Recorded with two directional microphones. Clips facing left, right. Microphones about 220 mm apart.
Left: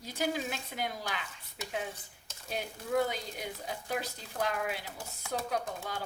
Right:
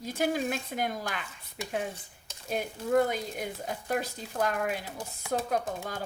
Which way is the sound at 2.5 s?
50° right (ahead or behind).